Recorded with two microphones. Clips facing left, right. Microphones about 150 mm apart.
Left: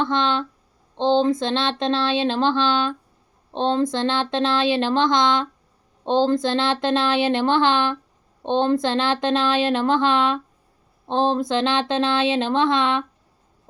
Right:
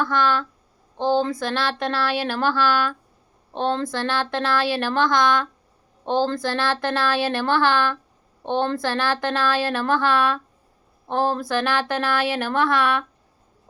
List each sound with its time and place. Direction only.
0.0 s speech: 25° left (ahead or behind)